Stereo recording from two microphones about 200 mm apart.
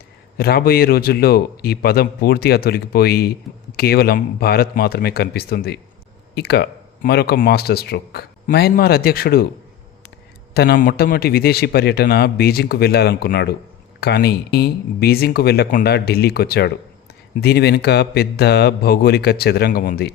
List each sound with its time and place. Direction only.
0.3 s speech: 50° left (ahead or behind)
10.5 s speech: 55° left (ahead or behind)